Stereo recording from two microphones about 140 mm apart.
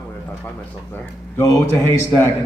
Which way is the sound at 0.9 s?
20° left (ahead or behind).